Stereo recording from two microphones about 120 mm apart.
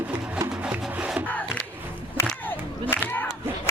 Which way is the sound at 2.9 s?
20° left (ahead or behind).